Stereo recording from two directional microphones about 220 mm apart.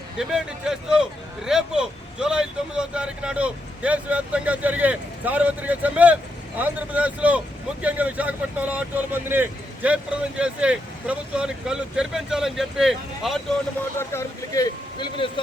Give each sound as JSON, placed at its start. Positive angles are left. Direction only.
{"t": 0.2, "sound": "speech", "side_deg": 0}
{"t": 14.0, "sound": "speech", "side_deg": 10}